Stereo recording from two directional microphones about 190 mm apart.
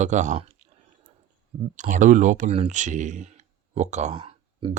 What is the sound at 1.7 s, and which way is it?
Speech, 40° right (ahead or behind).